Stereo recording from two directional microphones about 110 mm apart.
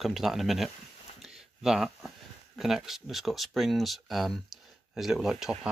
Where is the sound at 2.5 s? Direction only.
5° right (ahead or behind).